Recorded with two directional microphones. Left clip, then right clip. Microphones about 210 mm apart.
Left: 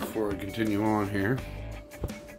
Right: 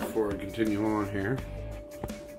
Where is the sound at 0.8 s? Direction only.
60° left (ahead or behind).